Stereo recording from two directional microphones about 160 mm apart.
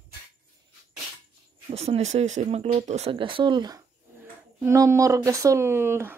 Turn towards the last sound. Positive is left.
turn(degrees=-15)  # may be behind; listen again after turning